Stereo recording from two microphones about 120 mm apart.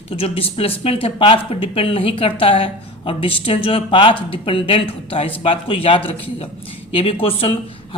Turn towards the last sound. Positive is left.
turn(degrees=50)  # may be behind; listen again after turning